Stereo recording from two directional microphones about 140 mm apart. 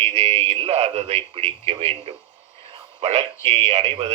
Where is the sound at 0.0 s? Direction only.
50° right (ahead or behind).